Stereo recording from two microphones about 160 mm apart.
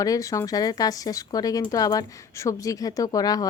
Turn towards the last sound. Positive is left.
turn(degrees=25)  # may be behind; listen again after turning